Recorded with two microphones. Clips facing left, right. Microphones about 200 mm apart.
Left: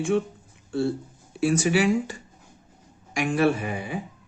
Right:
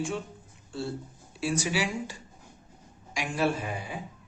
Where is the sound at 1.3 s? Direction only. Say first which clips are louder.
Left 7 dB; 55° left (ahead or behind).